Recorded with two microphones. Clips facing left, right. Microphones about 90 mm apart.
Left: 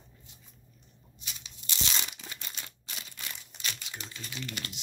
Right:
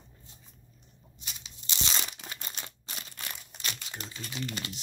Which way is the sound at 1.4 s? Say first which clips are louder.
Right 1 dB; 25° right (ahead or behind).